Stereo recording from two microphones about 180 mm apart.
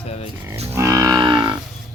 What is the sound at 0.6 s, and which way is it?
Livestock, 15° right (ahead or behind).